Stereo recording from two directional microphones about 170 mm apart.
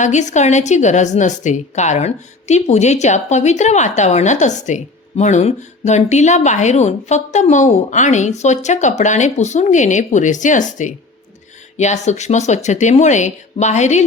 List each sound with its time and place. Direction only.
0.0 s a woman's voice: 45° left (ahead or behind)